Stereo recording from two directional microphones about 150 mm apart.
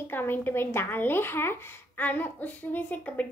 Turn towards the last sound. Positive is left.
turn(degrees=10)  # may be behind; listen again after turning